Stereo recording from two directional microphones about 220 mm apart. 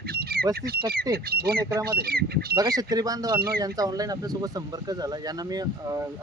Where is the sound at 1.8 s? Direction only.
45° right (ahead or behind).